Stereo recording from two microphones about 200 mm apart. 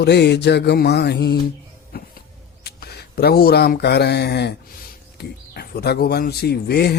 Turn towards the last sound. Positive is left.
turn(degrees=55)  # may be behind; listen again after turning